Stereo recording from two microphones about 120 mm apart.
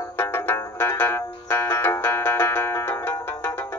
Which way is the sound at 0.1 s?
20° left (ahead or behind).